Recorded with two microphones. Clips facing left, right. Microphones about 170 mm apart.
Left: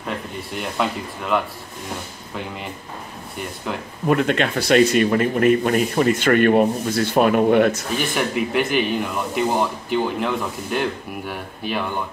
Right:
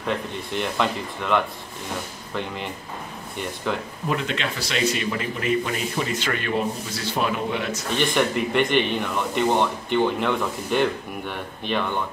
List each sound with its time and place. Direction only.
0.0 s speech: 5° left (ahead or behind)
4.1 s speech: 55° left (ahead or behind)
7.9 s speech: 5° left (ahead or behind)